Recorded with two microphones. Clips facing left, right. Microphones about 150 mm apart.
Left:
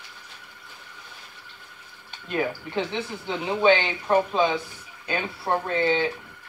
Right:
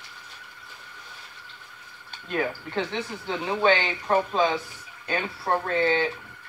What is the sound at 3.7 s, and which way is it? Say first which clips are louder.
Speech: left 3 dB; centre (ahead or behind).